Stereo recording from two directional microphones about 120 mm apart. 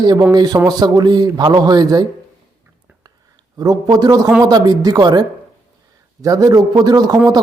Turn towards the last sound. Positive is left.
turn(degrees=-35)  # may be behind; listen again after turning